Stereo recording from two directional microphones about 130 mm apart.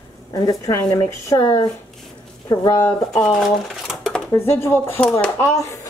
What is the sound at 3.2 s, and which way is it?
Speech, 5° left (ahead or behind).